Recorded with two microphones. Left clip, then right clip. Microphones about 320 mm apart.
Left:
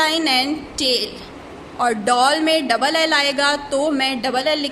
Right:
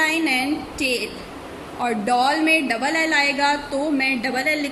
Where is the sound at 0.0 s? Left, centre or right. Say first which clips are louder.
Left 3 dB; centre.